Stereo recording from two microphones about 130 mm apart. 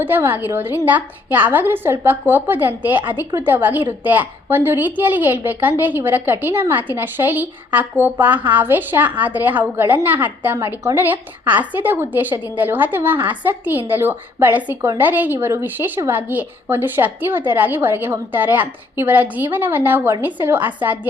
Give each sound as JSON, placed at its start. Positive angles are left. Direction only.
{"t": 0.0, "sound": "a woman's voice", "side_deg": -15}